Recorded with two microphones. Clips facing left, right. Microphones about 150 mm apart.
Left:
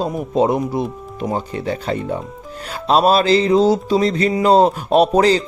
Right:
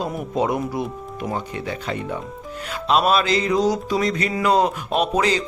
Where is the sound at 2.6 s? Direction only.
35° left (ahead or behind).